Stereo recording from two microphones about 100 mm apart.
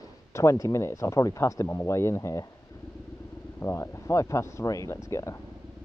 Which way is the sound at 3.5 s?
30° left (ahead or behind).